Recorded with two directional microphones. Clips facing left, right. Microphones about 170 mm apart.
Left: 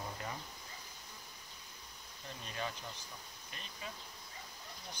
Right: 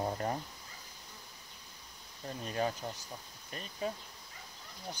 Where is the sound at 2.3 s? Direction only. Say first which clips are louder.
Right 8 dB; 45° right (ahead or behind).